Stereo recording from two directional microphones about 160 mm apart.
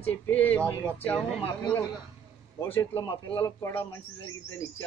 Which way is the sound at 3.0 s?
30° left (ahead or behind).